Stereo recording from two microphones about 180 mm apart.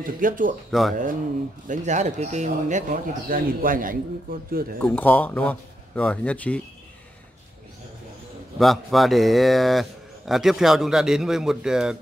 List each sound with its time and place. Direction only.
0.0 s speech: 50° right (ahead or behind)
0.7 s a man's voice: centre (ahead or behind)
1.7 s speech: 40° right (ahead or behind)
4.7 s speech: 10° left (ahead or behind)
8.5 s a man's voice: centre (ahead or behind)